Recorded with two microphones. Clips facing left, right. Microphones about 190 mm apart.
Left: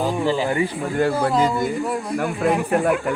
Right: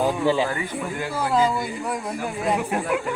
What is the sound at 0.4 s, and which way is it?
Speech, 25° left (ahead or behind).